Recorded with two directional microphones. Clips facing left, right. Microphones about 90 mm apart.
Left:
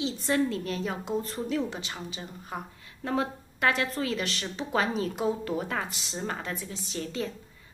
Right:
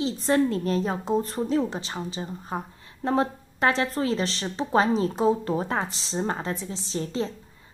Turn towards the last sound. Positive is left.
turn(degrees=-30)  # may be behind; listen again after turning